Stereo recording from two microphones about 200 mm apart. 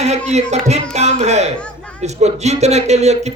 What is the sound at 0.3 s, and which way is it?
Speech, 35° right (ahead or behind).